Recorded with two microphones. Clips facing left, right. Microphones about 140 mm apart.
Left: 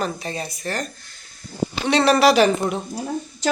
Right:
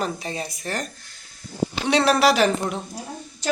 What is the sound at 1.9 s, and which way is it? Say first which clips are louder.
Speech: left 3 dB; 5° right (ahead or behind).